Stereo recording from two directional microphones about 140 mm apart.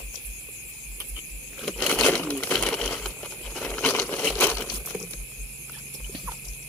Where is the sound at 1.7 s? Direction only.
5° left (ahead or behind).